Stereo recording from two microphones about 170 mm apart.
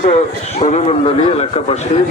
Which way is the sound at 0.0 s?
40° left (ahead or behind).